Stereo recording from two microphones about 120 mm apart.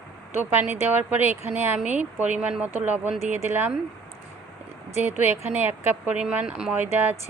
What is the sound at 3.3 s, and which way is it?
Speech, 20° right (ahead or behind).